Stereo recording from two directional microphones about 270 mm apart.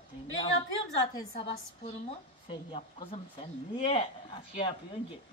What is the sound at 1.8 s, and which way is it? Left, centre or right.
Speech, centre.